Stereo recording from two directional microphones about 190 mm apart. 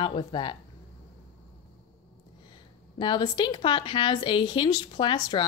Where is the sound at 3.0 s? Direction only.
25° left (ahead or behind).